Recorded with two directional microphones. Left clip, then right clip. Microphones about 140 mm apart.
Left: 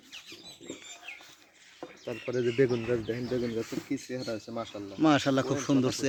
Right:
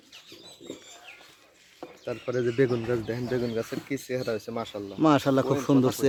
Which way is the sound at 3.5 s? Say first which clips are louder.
Right 3 dB; 85° right.